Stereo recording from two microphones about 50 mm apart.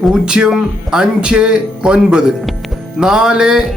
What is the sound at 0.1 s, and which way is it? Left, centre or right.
Speech, centre.